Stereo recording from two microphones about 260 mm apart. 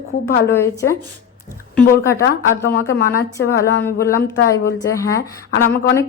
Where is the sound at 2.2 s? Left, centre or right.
Left.